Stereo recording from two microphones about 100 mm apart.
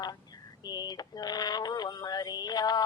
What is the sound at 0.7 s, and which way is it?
Synthetic singing, 45° left (ahead or behind).